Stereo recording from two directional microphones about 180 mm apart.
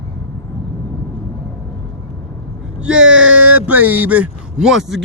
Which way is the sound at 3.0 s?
90° right.